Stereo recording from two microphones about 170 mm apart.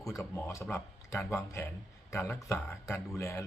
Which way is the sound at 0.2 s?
15° left (ahead or behind).